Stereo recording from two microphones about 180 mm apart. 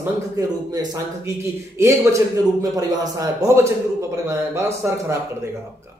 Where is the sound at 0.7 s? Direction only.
20° right (ahead or behind).